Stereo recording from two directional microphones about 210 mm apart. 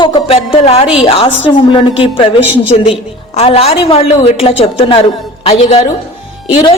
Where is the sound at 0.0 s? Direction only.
25° left (ahead or behind).